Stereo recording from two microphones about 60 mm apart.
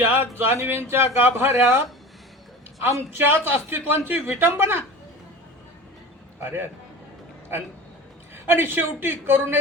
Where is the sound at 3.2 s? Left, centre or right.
Right.